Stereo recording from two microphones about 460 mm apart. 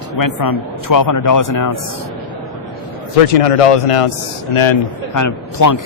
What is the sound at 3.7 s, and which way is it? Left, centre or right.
A man's voice, left.